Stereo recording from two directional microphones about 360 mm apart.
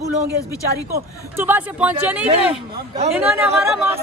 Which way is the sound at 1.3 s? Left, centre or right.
Centre.